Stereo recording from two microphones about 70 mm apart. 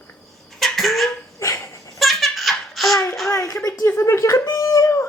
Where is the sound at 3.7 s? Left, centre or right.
Left.